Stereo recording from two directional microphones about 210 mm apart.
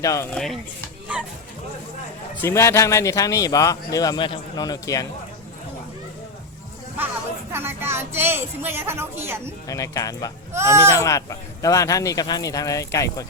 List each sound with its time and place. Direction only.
0.0 s a man's voice: 15° left (ahead or behind)
0.3 s speech: centre (ahead or behind)
2.4 s a man's voice: 15° left (ahead or behind)
7.5 s speech: 10° right (ahead or behind)
9.6 s a man's voice: 15° left (ahead or behind)
10.5 s speech: 15° right (ahead or behind)
11.0 s a man's voice: 15° left (ahead or behind)